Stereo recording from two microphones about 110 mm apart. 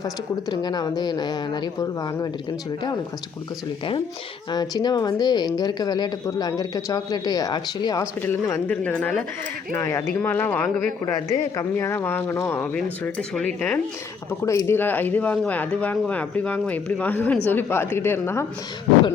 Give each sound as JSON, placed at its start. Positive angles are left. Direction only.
{"t": 0.5, "sound": "a woman's voice", "side_deg": 40}
{"t": 4.5, "sound": "a woman's voice", "side_deg": 35}
{"t": 8.2, "sound": "speech", "side_deg": 25}
{"t": 8.6, "sound": "speech", "side_deg": 10}
{"t": 9.7, "sound": "speech", "side_deg": 25}
{"t": 14.3, "sound": "speech", "side_deg": 25}